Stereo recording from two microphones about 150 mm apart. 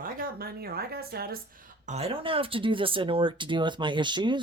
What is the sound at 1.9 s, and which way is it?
Speech, 40° right (ahead or behind).